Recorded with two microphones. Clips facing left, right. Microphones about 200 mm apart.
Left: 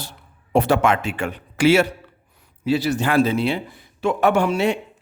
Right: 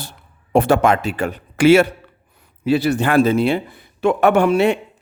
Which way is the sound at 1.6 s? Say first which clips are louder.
Right 4 dB; 55° right (ahead or behind).